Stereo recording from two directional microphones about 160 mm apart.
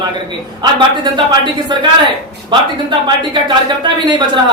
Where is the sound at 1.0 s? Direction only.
30° right (ahead or behind).